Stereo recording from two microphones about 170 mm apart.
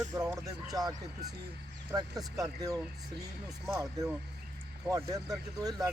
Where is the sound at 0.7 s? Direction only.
20° right (ahead or behind).